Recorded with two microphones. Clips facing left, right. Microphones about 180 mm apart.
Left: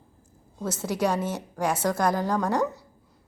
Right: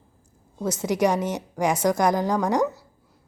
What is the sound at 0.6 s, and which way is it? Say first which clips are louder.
A woman's voice: right 4 dB; 15° right (ahead or behind).